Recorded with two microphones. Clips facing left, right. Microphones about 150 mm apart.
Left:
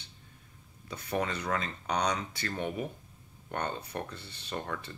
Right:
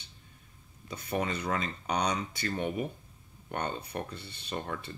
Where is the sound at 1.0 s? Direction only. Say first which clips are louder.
Even; 5° right (ahead or behind).